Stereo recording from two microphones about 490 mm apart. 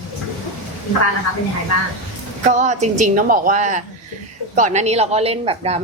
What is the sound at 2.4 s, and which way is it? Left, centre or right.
A woman's voice, centre.